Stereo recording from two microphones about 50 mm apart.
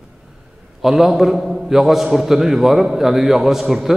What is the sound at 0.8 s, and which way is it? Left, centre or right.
A man's voice, centre.